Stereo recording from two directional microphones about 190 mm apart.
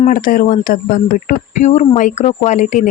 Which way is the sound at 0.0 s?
45° left (ahead or behind).